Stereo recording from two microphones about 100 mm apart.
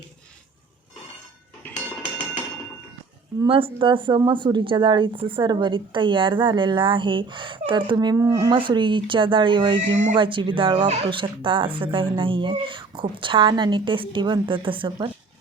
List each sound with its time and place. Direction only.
3.4 s speech: 60° right (ahead or behind)
7.9 s speech: 35° right (ahead or behind)
8.5 s speech: 55° right (ahead or behind)